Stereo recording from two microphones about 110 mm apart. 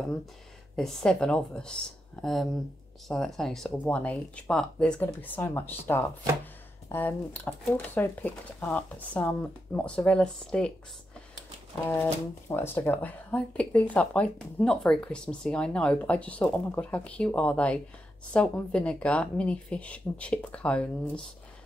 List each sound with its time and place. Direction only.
0.7 s speech: 5° left (ahead or behind)
3.1 s speech: 5° left (ahead or behind)
11.8 s speech: 25° left (ahead or behind)